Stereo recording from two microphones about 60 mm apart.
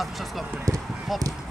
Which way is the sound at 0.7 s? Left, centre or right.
Right.